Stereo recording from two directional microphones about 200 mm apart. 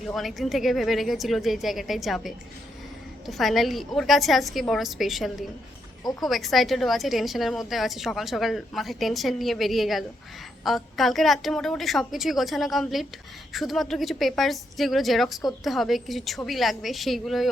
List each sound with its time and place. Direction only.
0.0 s a woman's voice: centre (ahead or behind)
6.0 s speech: 20° left (ahead or behind)
6.2 s a woman's voice: centre (ahead or behind)